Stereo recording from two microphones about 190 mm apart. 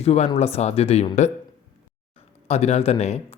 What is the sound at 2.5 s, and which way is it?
Speech, 35° left (ahead or behind).